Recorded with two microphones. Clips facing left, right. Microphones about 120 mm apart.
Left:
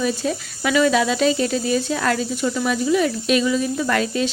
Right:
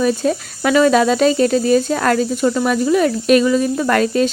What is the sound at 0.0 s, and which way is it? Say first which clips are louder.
Speech: right 6 dB; 50° right (ahead or behind).